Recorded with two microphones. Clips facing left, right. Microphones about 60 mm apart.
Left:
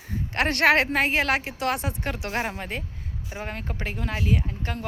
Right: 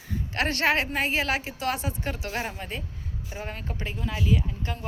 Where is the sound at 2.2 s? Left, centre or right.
Left.